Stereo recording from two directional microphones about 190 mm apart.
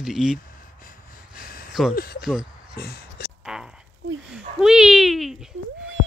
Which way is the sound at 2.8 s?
55° left (ahead or behind).